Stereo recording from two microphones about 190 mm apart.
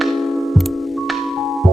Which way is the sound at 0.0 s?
Centre (ahead or behind).